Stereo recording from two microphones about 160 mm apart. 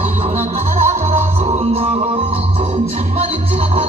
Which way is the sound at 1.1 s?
40° right (ahead or behind).